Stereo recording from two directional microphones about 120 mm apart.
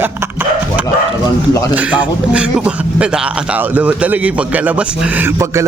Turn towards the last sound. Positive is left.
turn(degrees=-25)  # may be behind; listen again after turning